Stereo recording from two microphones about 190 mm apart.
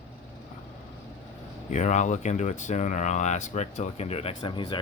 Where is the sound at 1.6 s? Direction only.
40° left (ahead or behind).